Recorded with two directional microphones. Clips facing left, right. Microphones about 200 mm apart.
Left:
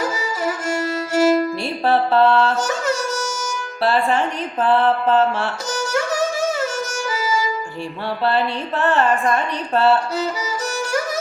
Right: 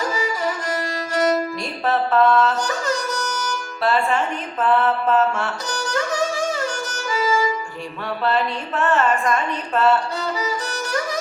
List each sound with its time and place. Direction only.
0.7 s violin: 25° left (ahead or behind)
1.8 s a sound: 30° left (ahead or behind)
3.8 s a woman's voice: 35° left (ahead or behind)
8.2 s a woman's voice: 30° left (ahead or behind)